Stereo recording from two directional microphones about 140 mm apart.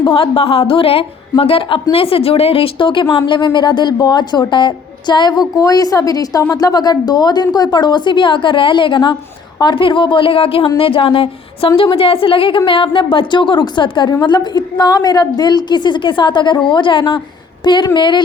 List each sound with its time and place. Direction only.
0.0 s a woman's voice: 40° left (ahead or behind)